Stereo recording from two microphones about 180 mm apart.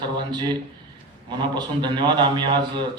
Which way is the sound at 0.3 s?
25° right (ahead or behind).